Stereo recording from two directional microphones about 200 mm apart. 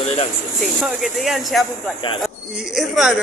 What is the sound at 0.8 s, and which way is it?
Speech, centre (ahead or behind).